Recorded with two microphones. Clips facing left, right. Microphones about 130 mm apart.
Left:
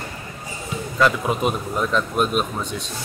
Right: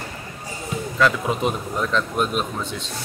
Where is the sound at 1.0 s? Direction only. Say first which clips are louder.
Left 1 dB; 10° left (ahead or behind).